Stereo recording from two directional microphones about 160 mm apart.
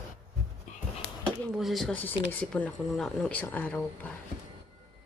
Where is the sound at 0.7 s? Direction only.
50° left (ahead or behind).